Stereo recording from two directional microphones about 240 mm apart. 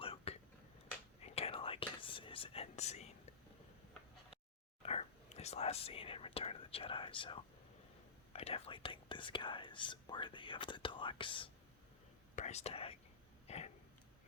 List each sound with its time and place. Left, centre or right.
0.0 s a sound: left
1.2 s whispering: left
4.8 s speech: left